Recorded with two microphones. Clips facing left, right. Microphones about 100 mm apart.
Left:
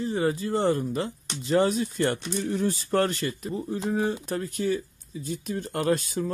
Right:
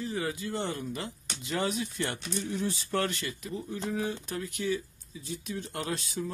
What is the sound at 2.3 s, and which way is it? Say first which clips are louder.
Speech: left 6 dB; 55° left (ahead or behind).